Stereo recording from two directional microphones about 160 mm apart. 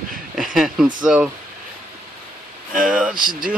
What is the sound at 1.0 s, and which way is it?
Speech, 5° right (ahead or behind).